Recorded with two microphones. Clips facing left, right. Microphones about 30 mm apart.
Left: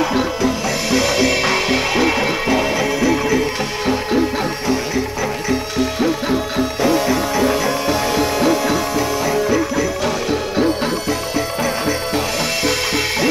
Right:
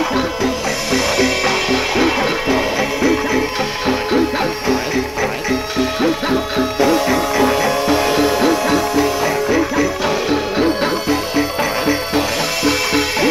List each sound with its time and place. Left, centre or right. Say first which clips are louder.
0.1 s music: even; centre
2.0 s music: right 1 dB; centre